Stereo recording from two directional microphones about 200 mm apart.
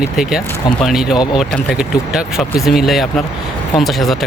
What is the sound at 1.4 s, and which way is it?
Speech, 5° right (ahead or behind).